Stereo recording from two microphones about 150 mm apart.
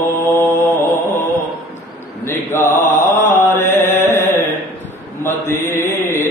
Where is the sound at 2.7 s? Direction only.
50° left (ahead or behind).